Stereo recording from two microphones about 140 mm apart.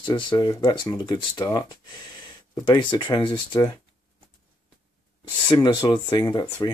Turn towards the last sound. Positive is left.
turn(degrees=30)  # may be behind; listen again after turning